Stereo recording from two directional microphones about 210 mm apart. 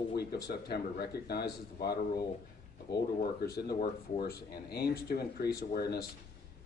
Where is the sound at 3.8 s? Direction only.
40° left (ahead or behind).